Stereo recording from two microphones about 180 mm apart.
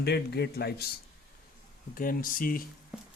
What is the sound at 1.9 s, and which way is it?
Speech, 50° left (ahead or behind).